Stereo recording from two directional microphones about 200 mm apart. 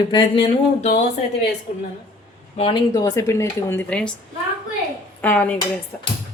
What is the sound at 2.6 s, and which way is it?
Speech, 20° left (ahead or behind).